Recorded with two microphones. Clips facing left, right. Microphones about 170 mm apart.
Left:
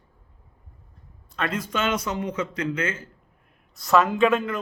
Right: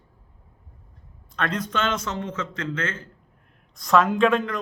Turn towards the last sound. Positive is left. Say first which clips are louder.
# even
turn(degrees=0)  # may be behind; listen again after turning